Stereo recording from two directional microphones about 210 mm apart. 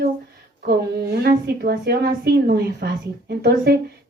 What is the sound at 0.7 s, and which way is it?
A woman's voice, 50° right (ahead or behind).